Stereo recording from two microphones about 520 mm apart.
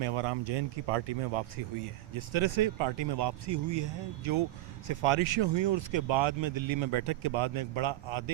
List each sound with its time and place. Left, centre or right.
0.0 s speech: right
2.1 s speech: right